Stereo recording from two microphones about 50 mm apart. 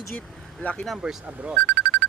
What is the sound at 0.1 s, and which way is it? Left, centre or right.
Speech, left.